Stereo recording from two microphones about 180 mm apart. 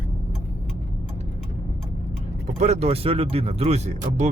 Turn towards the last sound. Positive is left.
turn(degrees=-40)  # may be behind; listen again after turning